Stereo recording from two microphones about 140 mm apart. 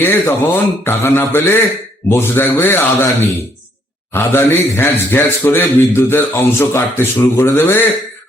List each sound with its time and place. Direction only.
0.0 s a man's voice: 15° left (ahead or behind)